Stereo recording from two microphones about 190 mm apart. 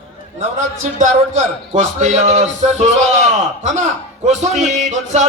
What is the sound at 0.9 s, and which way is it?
A man's voice, 40° right (ahead or behind).